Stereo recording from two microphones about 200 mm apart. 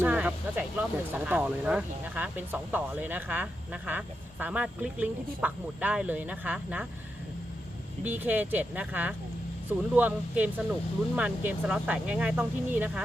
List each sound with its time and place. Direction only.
0.0 s speech: 10° right (ahead or behind)
8.0 s speech: 10° right (ahead or behind)